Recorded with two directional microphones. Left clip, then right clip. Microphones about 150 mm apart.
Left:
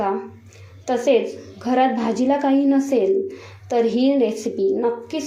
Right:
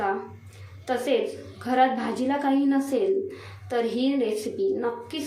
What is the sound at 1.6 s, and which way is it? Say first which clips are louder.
A woman's voice: left 3 dB; 25° left (ahead or behind).